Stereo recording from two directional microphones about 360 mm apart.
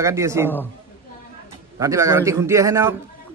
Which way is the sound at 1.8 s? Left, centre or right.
Centre.